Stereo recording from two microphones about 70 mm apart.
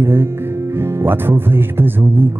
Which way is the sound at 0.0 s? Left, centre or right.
Right.